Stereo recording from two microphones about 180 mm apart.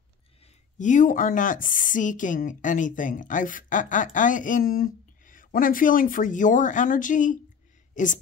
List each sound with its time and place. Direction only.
0.7 s a woman's voice: 45° left (ahead or behind)